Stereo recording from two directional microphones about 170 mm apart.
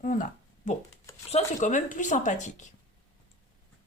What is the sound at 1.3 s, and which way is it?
A woman's voice, 45° left (ahead or behind).